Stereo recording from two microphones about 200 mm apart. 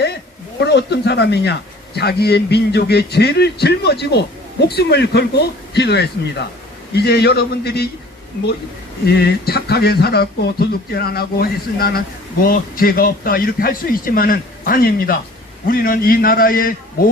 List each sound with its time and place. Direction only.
0.6 s speech: 55° left (ahead or behind)
9.0 s speech: 55° left (ahead or behind)